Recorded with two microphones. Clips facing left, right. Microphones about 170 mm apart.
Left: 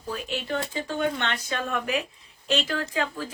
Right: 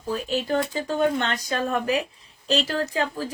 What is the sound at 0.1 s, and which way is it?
Speech, 40° right (ahead or behind).